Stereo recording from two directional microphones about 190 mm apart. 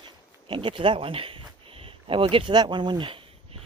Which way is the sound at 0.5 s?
25° right (ahead or behind).